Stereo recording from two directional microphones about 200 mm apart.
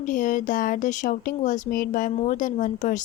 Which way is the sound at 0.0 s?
40° left (ahead or behind).